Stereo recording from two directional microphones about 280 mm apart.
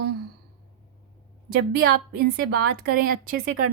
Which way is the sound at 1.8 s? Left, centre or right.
Right.